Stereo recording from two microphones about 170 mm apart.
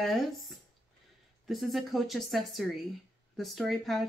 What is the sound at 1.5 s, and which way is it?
Speech, centre (ahead or behind).